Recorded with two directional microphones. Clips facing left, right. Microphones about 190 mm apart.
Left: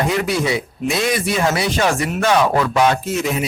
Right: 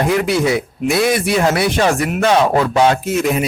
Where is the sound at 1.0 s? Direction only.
60° right (ahead or behind).